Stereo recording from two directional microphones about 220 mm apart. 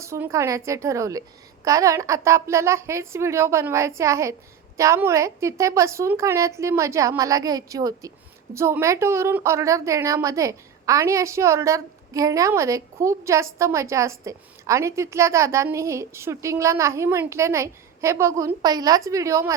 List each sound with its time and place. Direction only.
0.0 s a woman's voice: 15° right (ahead or behind)